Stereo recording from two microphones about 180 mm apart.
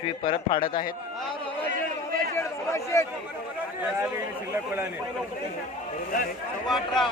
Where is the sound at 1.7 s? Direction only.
50° right (ahead or behind).